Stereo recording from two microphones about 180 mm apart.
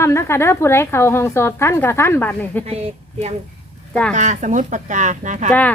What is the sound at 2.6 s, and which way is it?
Speech, 35° right (ahead or behind).